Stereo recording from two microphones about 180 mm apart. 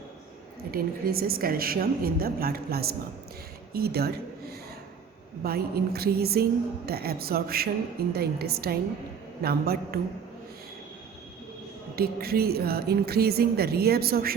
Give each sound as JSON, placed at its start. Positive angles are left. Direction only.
{"t": 0.7, "sound": "speech", "side_deg": -55}
{"t": 5.4, "sound": "speech", "side_deg": -60}
{"t": 11.9, "sound": "speech", "side_deg": -60}